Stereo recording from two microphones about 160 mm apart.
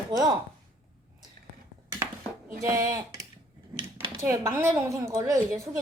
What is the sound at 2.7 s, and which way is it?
Speech, 20° right (ahead or behind).